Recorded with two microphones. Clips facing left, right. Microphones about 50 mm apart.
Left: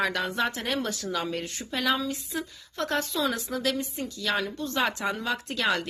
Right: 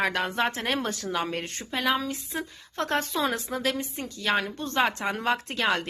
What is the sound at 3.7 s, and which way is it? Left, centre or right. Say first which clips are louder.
A woman's voice: left 1 dB; right.